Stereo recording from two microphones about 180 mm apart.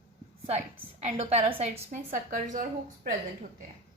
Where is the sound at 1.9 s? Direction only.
50° right (ahead or behind).